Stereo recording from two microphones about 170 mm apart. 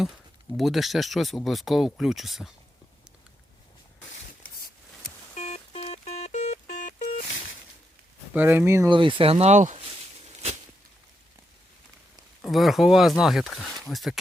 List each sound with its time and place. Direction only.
0.5 s speech: centre (ahead or behind)
5.3 s telephone dialing: 45° left (ahead or behind)
8.3 s speech: 10° right (ahead or behind)
8.9 s a sound: 30° right (ahead or behind)
12.4 s speech: centre (ahead or behind)